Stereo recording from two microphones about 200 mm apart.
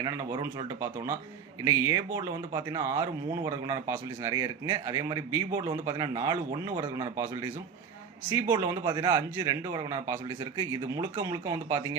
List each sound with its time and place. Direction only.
0.0 s a man's voice: 15° right (ahead or behind)
8.3 s speech: 15° right (ahead or behind)